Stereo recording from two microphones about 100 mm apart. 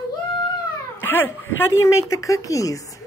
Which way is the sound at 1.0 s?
20° left (ahead or behind).